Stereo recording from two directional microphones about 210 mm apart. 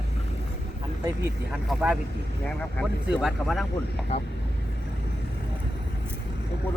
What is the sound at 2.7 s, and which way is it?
Speech, centre (ahead or behind).